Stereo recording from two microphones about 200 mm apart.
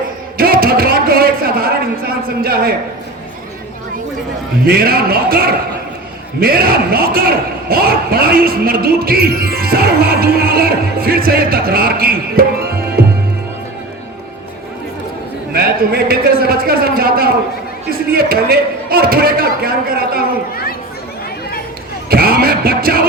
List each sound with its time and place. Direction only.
0.3 s a sound: 45° right (ahead or behind)
2.2 s a man's voice: 50° right (ahead or behind)
4.6 s a man's voice: 50° right (ahead or behind)
6.4 s a man's voice: 50° right (ahead or behind)
15.5 s a man's voice: 50° right (ahead or behind)
22.1 s music: 50° right (ahead or behind)